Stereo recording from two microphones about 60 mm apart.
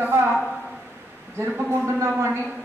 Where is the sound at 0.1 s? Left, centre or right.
Right.